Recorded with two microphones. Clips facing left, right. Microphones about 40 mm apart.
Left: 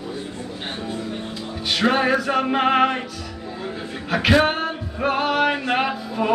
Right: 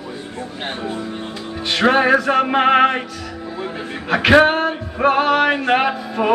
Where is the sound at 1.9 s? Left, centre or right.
Centre.